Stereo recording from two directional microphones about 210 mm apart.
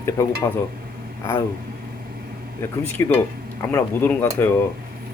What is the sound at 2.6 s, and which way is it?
Speech, 10° left (ahead or behind).